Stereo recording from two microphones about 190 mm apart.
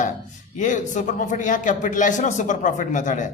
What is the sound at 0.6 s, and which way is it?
Speech, 40° left (ahead or behind).